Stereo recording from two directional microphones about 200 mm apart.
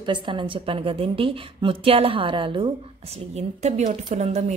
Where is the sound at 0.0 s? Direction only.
25° right (ahead or behind).